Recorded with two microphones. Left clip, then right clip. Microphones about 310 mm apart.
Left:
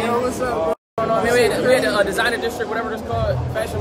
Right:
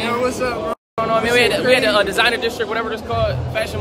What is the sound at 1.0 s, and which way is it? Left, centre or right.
Speech, centre.